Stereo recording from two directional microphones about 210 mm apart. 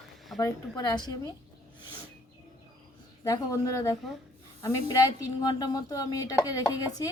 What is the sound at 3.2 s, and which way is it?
Speech, 15° left (ahead or behind).